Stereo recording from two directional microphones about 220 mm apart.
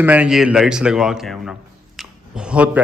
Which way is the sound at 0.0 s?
5° right (ahead or behind).